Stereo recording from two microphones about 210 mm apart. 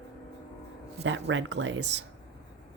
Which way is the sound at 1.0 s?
60° right (ahead or behind).